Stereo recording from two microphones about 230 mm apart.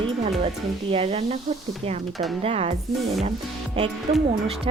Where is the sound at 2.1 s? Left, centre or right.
Centre.